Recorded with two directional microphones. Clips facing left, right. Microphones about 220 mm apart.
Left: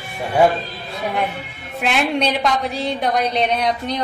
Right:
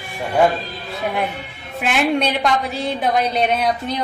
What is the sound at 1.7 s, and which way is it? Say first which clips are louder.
A woman's voice: right 1 dB; centre (ahead or behind).